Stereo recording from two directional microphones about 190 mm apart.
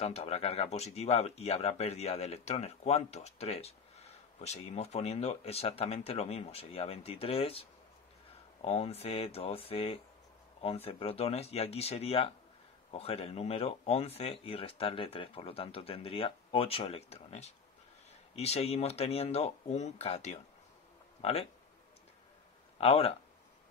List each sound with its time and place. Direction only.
0.0 s speech: 35° left (ahead or behind)
8.6 s speech: 30° left (ahead or behind)
22.8 s speech: 30° left (ahead or behind)